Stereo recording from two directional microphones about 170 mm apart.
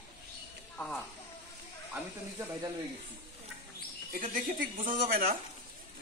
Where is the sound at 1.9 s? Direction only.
10° right (ahead or behind).